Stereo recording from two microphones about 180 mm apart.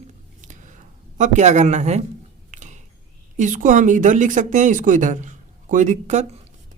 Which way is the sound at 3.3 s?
45° right (ahead or behind).